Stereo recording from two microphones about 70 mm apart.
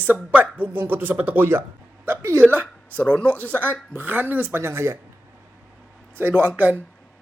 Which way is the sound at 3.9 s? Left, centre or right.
Right.